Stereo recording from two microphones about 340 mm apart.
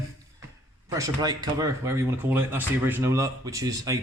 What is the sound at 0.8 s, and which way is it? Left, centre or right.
Speech, centre.